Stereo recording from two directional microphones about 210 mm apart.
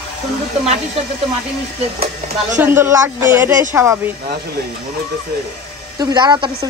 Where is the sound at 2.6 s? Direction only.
10° right (ahead or behind).